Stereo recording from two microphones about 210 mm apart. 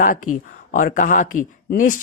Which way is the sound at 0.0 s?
40° left (ahead or behind).